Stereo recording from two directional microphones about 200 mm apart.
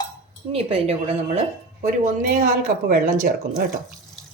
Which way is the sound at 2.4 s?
45° right (ahead or behind).